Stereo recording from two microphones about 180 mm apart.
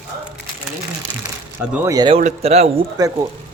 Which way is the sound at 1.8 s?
20° right (ahead or behind).